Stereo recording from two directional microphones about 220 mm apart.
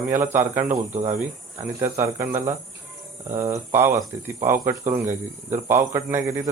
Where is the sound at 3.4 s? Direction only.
10° right (ahead or behind).